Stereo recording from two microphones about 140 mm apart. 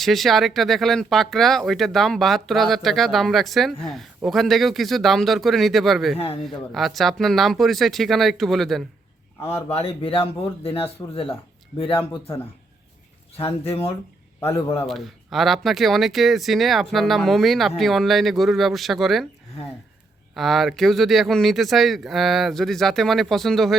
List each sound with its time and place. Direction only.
0.0 s speech: centre (ahead or behind)
6.1 s speech: 45° left (ahead or behind)
6.7 s speech: centre (ahead or behind)
9.6 s speech: 45° left (ahead or behind)
13.3 s speech: 45° left (ahead or behind)
14.8 s speech: centre (ahead or behind)
20.3 s speech: centre (ahead or behind)